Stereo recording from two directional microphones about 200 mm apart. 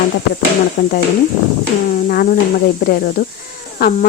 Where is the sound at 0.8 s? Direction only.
55° left (ahead or behind).